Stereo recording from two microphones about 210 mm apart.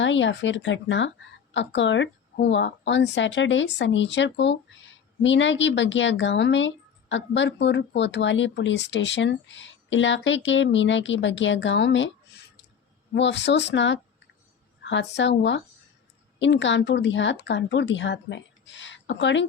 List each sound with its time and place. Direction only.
0.0 s speech: 60° left (ahead or behind)
13.1 s speech: 55° left (ahead or behind)